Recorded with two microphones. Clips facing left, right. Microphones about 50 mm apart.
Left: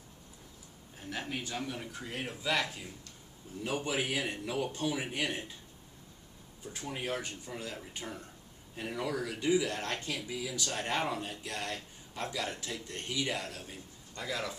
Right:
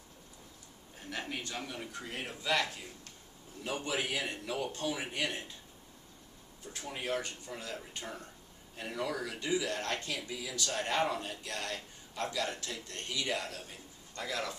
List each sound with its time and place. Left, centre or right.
1.1 s speech: centre
6.7 s speech: centre
13.3 s speech: centre